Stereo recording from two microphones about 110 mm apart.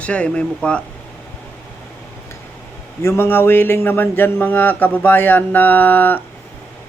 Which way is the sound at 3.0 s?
20° left (ahead or behind).